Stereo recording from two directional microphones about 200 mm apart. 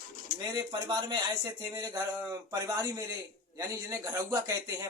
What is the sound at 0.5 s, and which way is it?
Speech, 20° right (ahead or behind).